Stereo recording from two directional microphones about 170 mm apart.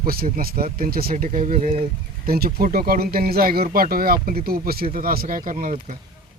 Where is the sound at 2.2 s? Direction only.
60° right (ahead or behind).